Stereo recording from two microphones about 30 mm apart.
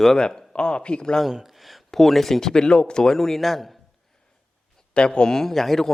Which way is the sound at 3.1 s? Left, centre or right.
Centre.